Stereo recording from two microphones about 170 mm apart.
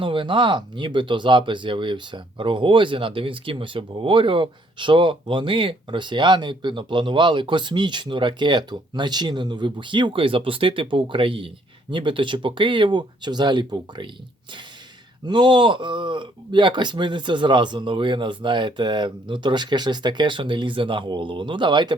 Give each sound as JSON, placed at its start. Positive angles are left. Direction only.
{"t": 0.0, "sound": "speech", "side_deg": -30}
{"t": 15.3, "sound": "speech", "side_deg": -25}